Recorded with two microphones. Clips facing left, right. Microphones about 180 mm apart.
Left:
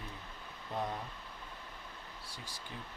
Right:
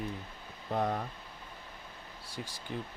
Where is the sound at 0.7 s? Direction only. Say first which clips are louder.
Right 7 dB; 55° right (ahead or behind).